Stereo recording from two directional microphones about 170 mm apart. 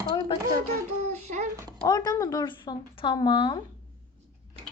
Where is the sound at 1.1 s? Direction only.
40° right (ahead or behind).